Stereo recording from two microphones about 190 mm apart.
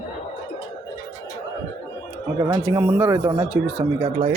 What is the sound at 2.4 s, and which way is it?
Speech, 15° right (ahead or behind).